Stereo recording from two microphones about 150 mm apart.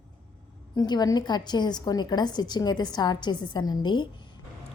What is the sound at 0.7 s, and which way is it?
A woman's voice, 25° left (ahead or behind).